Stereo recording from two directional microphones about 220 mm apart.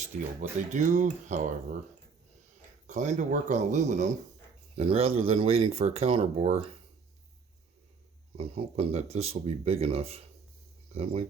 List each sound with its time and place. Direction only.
0.7 s speech: 35° right (ahead or behind)
2.8 s speech: 30° right (ahead or behind)
8.4 s speech: 25° right (ahead or behind)